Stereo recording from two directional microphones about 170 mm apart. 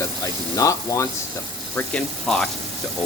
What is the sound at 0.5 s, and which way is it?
Speech, 20° left (ahead or behind).